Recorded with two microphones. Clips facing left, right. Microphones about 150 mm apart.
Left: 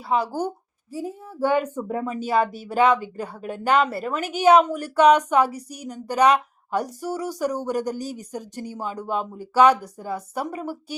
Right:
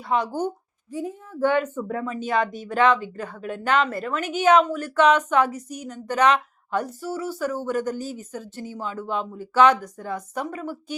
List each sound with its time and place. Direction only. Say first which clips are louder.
0.1 s speech: even; 5° left (ahead or behind)
1.8 s speech: left 1 dB; 25° left (ahead or behind)
2.2 s speech: left 2 dB; 10° left (ahead or behind)